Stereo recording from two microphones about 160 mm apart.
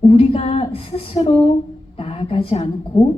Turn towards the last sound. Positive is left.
turn(degrees=40)  # may be behind; listen again after turning